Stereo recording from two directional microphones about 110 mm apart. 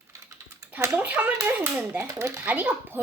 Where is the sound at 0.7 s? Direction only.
15° right (ahead or behind).